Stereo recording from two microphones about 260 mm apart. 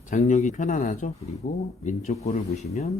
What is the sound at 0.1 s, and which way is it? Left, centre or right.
A man's voice, left.